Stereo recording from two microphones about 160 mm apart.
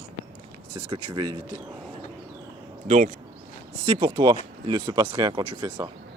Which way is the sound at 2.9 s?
45° right (ahead or behind).